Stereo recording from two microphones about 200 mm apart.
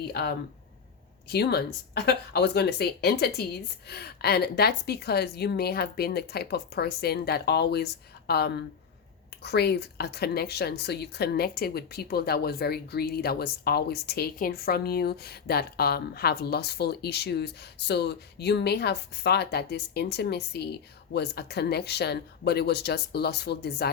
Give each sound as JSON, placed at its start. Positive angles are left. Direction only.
{"t": 0.1, "sound": "speech", "side_deg": 50}